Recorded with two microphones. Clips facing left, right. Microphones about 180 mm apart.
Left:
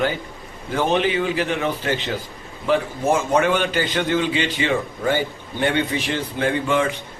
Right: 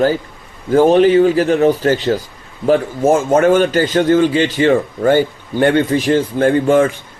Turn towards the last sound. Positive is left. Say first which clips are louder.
# right 8 dB
turn(degrees=-45)  # may be behind; listen again after turning